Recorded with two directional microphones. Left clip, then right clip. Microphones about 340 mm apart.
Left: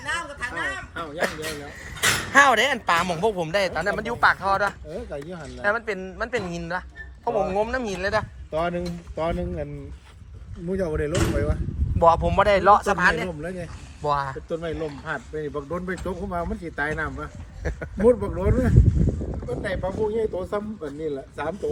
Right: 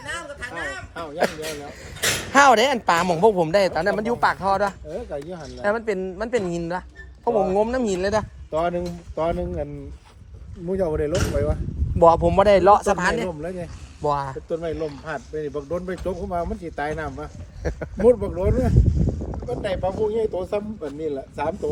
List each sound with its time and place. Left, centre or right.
0.2 s a sound: centre
1.3 s speech: centre
2.3 s speech: centre
10.7 s speech: right
15.3 s speech: centre
17.6 s speech: right
18.1 s speech: centre
18.9 s a sound: centre
19.8 s speech: centre